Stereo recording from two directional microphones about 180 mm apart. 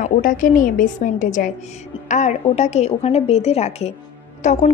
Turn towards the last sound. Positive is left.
turn(degrees=40)  # may be behind; listen again after turning